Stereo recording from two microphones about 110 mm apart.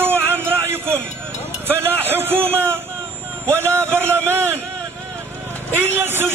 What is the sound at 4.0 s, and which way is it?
Speech, 20° right (ahead or behind).